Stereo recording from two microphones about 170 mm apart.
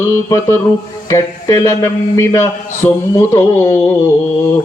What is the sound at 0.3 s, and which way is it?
Speech, 15° left (ahead or behind).